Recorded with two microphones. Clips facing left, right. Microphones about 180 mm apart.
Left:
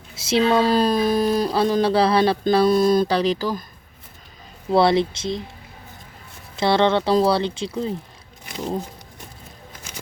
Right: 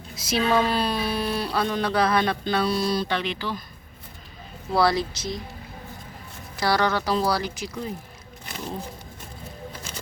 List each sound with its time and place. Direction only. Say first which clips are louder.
0.2 s speech: left 4 dB; 25° left (ahead or behind)
0.7 s speech: left 7 dB; 40° left (ahead or behind)
4.7 s speech: left 5 dB; 25° left (ahead or behind)
6.6 s speech: left 5 dB; 25° left (ahead or behind)